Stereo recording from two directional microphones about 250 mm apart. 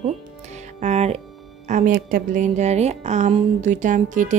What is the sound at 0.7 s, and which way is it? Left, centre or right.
Music, right.